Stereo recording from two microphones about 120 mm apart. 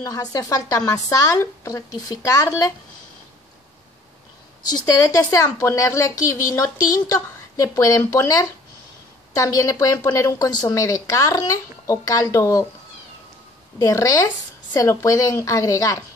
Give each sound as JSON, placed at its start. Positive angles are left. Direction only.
{"t": 0.0, "sound": "a woman's voice", "side_deg": 30}
{"t": 4.8, "sound": "a woman's voice", "side_deg": 30}
{"t": 9.3, "sound": "a woman's voice", "side_deg": 25}
{"t": 13.7, "sound": "a woman's voice", "side_deg": 30}